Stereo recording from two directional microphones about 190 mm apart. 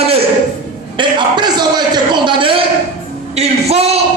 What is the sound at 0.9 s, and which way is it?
A man's voice, 25° right (ahead or behind).